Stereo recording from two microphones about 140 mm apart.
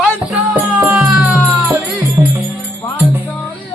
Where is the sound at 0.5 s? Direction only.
15° right (ahead or behind).